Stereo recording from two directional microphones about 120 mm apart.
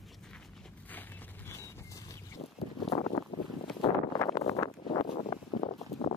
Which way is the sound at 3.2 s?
25° left (ahead or behind).